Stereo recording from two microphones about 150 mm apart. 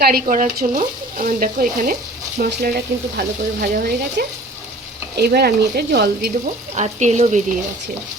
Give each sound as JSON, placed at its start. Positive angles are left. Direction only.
{"t": 0.0, "sound": "speech", "side_deg": -75}
{"t": 2.4, "sound": "speech", "side_deg": -80}
{"t": 6.7, "sound": "speech", "side_deg": -50}